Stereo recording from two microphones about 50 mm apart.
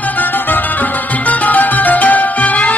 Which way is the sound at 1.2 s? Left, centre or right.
Left.